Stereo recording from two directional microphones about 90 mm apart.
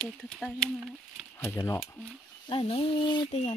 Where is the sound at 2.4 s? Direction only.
70° left (ahead or behind).